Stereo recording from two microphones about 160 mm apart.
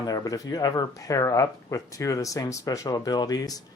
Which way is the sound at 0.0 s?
25° left (ahead or behind).